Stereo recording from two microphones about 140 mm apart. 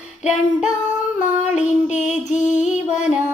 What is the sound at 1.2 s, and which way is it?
Child singing, 60° left (ahead or behind).